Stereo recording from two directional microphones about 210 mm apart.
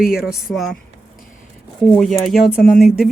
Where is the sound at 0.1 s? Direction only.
5° right (ahead or behind).